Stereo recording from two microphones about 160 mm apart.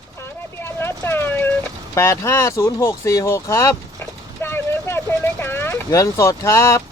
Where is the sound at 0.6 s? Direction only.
15° left (ahead or behind).